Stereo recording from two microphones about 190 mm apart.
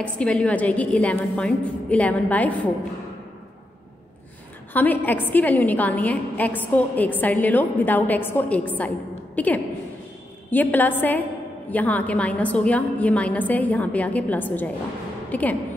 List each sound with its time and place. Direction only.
0.0 s a woman's voice: 5° left (ahead or behind)
4.7 s a woman's voice: 10° left (ahead or behind)